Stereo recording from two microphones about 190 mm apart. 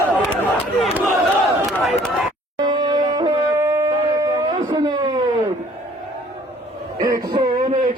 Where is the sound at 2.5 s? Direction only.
20° right (ahead or behind).